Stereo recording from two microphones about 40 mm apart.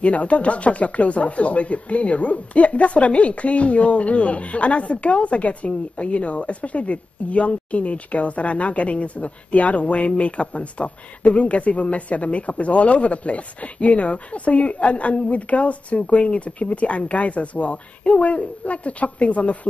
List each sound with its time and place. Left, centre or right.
0.0 s speech: left